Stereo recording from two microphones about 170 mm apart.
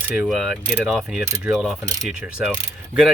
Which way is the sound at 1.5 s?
Centre (ahead or behind).